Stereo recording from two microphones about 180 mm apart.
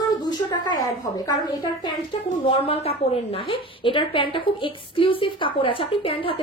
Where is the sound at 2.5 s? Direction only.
30° left (ahead or behind).